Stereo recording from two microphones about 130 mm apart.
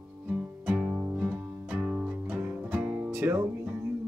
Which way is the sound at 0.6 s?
10° right (ahead or behind).